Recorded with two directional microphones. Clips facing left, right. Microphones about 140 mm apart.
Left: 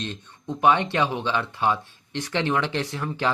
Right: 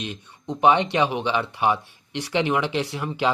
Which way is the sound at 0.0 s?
15° right (ahead or behind).